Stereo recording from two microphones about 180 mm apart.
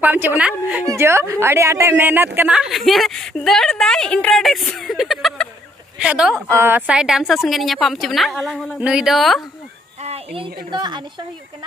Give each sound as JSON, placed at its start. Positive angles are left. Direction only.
{"t": 0.0, "sound": "a woman's voice", "side_deg": -10}
{"t": 10.0, "sound": "a sound", "side_deg": -35}
{"t": 10.7, "sound": "a woman's voice", "side_deg": -25}